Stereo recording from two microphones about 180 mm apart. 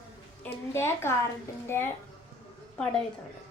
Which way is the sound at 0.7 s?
15° left (ahead or behind).